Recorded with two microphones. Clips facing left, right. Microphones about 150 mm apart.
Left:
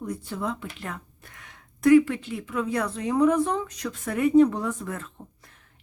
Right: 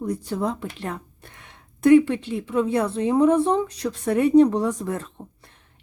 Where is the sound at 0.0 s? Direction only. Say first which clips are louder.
Right 5 dB; 35° right (ahead or behind).